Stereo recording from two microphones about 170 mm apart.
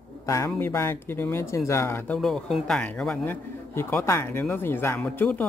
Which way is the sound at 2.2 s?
Centre (ahead or behind).